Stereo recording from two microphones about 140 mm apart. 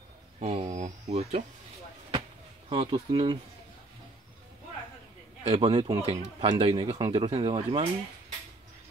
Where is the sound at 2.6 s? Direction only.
45° right (ahead or behind).